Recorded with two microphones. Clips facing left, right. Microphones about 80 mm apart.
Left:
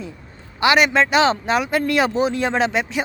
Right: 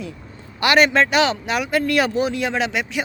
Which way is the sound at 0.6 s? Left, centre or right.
Centre.